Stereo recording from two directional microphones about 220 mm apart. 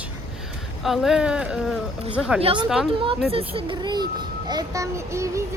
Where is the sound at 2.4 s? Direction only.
20° right (ahead or behind).